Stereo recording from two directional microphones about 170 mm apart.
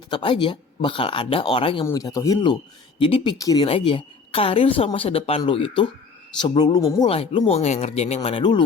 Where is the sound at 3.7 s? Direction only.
30° left (ahead or behind).